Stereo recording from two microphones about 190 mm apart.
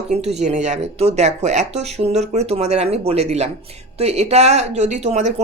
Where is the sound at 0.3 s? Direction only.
35° right (ahead or behind).